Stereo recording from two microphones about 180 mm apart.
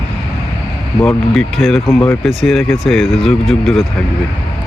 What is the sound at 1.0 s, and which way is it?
Speech, 5° left (ahead or behind).